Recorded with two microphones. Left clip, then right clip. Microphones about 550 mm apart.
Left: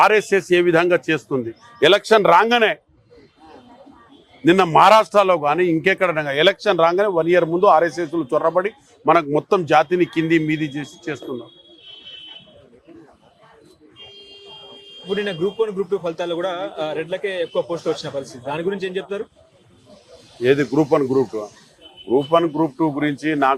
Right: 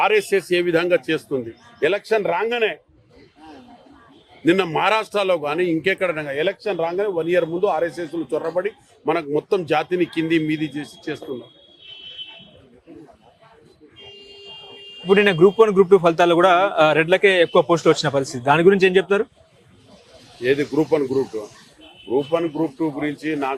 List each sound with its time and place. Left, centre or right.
0.0 s a man's voice: left
1.8 s speech: left
4.4 s a man's voice: left
15.0 s a man's voice: right
20.4 s speech: left
22.1 s a man's voice: left